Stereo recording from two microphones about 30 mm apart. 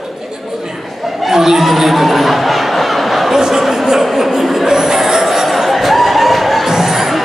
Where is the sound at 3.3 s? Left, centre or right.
Centre.